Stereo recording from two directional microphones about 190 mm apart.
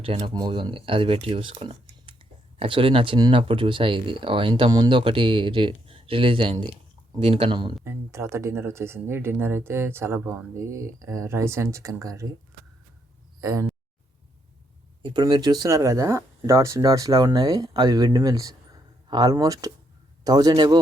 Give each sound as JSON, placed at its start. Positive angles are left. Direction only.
{"t": 0.0, "sound": "speech", "side_deg": -30}
{"t": 7.9, "sound": "speech", "side_deg": -15}
{"t": 13.4, "sound": "a sound", "side_deg": -20}
{"t": 15.0, "sound": "speech", "side_deg": -20}